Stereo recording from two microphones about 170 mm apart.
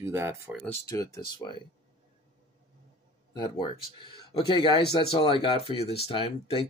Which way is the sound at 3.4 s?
25° left (ahead or behind).